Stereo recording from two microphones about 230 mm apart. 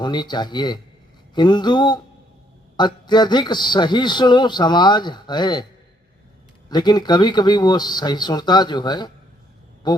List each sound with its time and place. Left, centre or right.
0.0 s a man's voice: centre
6.7 s a man's voice: centre